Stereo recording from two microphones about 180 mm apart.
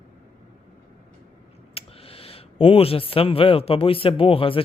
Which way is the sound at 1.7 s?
30° left (ahead or behind).